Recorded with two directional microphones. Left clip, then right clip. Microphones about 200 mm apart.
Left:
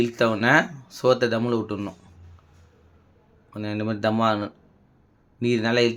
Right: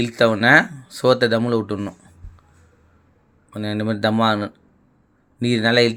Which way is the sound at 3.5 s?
20° right (ahead or behind).